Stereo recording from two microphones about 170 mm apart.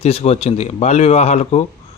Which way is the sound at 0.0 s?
35° left (ahead or behind).